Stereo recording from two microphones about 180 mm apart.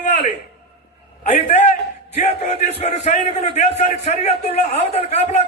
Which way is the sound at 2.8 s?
35° left (ahead or behind).